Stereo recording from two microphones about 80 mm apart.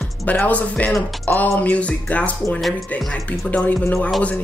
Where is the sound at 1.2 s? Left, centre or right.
Left.